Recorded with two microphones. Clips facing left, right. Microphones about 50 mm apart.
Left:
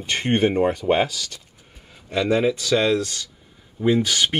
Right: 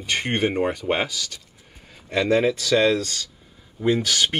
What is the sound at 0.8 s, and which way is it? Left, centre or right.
Speech, centre.